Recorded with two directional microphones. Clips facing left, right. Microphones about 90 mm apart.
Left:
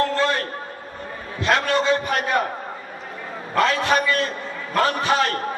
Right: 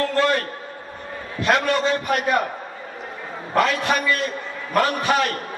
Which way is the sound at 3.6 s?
30° left (ahead or behind).